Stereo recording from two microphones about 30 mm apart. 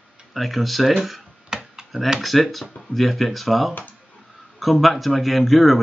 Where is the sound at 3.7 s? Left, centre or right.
Left.